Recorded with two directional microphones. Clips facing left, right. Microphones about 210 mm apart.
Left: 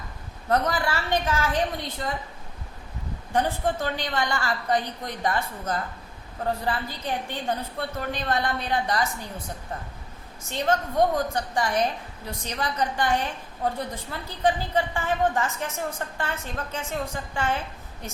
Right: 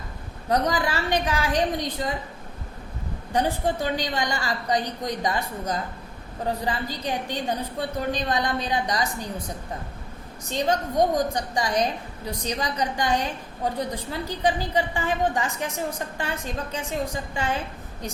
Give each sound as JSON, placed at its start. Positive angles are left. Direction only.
{"t": 0.5, "sound": "a woman's voice", "side_deg": -15}
{"t": 3.3, "sound": "a woman's voice", "side_deg": -15}
{"t": 10.5, "sound": "a woman's voice", "side_deg": -15}